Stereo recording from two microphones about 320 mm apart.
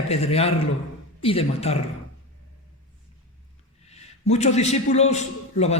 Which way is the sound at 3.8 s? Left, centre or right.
Centre.